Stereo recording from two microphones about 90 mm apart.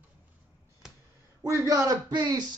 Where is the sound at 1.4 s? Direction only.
35° right (ahead or behind); by 2.4 s 50° right (ahead or behind).